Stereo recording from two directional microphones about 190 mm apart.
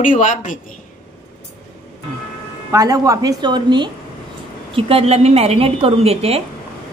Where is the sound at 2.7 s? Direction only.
15° right (ahead or behind).